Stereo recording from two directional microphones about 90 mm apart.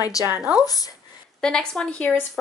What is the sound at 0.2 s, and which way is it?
Speech, 40° left (ahead or behind).